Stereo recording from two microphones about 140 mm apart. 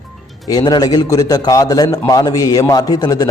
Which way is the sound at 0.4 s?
30° left (ahead or behind).